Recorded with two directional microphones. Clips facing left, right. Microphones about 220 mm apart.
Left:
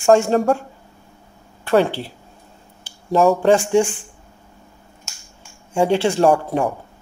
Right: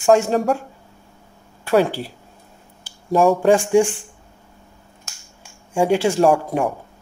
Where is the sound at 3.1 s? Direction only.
5° right (ahead or behind).